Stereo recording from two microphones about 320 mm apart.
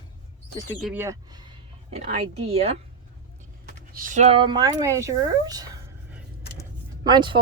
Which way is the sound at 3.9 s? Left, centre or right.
Right.